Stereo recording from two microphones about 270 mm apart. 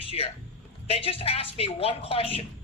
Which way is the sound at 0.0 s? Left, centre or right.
Left.